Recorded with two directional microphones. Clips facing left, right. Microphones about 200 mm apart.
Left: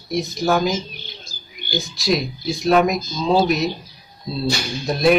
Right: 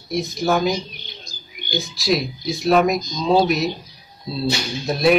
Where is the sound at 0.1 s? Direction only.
Centre (ahead or behind).